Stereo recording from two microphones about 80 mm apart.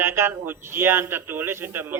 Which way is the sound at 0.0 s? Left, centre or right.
Right.